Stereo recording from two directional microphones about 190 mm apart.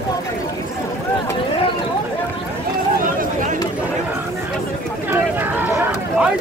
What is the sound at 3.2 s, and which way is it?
Chatter, 45° right (ahead or behind).